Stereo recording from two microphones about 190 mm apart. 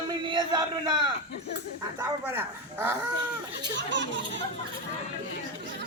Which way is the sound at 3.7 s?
70° right (ahead or behind).